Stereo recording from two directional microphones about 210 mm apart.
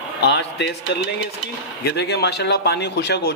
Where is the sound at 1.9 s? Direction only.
50° left (ahead or behind).